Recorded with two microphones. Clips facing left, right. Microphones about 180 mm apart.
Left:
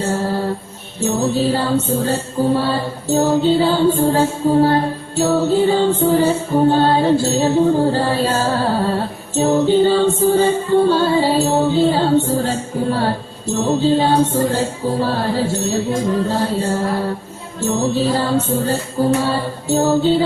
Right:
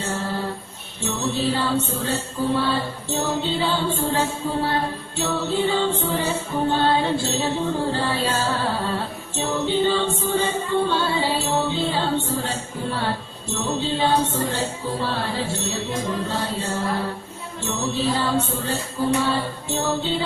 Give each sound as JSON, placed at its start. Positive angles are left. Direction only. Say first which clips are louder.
{"t": 0.0, "sound": "music", "louder": "left 7 dB", "side_deg": 40}
{"t": 17.7, "sound": "music", "louder": "left 7 dB", "side_deg": 40}